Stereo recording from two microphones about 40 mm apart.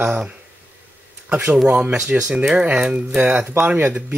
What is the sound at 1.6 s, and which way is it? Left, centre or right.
Speech, right.